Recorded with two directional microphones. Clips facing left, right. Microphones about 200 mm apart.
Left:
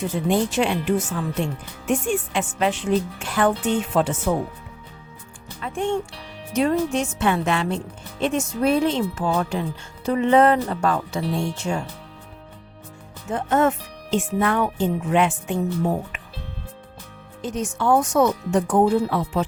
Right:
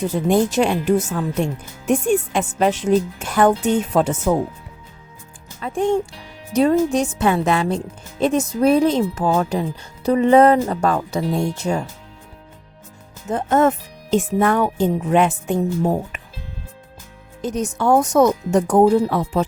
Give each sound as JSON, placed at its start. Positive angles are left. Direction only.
{"t": 0.3, "sound": "a woman's voice", "side_deg": -45}
{"t": 5.6, "sound": "a woman's voice", "side_deg": -35}
{"t": 13.3, "sound": "a woman's voice", "side_deg": -40}
{"t": 17.4, "sound": "speech", "side_deg": -40}